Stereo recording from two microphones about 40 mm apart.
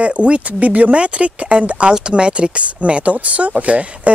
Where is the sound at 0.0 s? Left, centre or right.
Right.